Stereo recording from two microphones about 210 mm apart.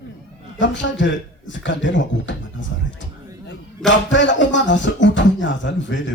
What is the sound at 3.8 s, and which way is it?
Speech, 60° left (ahead or behind).